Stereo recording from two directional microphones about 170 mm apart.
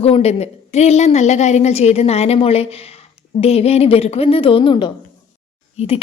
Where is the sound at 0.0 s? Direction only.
35° left (ahead or behind).